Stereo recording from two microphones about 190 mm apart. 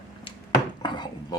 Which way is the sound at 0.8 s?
20° left (ahead or behind).